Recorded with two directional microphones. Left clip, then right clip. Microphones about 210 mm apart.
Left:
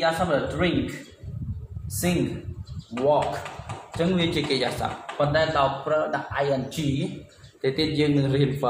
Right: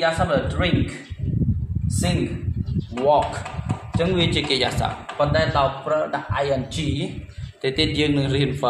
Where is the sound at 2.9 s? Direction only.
15° right (ahead or behind).